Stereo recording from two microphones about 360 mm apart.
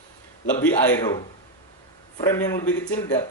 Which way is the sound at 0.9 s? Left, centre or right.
Centre.